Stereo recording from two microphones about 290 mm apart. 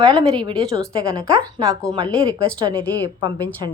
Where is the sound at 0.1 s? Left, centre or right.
Centre.